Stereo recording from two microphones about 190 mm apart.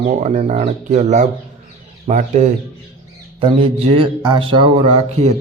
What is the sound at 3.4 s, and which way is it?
Speech, 30° right (ahead or behind).